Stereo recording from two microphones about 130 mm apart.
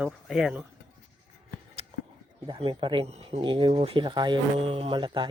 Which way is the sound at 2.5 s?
40° right (ahead or behind).